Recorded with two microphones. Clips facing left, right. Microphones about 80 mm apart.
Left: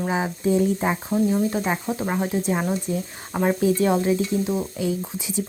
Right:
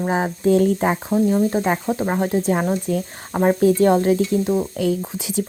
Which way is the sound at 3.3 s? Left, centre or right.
Right.